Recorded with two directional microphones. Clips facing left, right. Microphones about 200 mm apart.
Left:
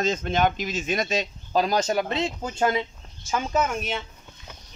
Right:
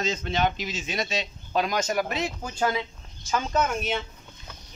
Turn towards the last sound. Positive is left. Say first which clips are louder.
# right 1 dB
turn(degrees=0)  # may be behind; listen again after turning